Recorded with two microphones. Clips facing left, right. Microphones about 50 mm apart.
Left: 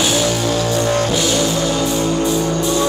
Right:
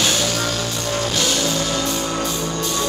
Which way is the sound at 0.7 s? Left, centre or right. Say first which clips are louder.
Left 7 dB; left.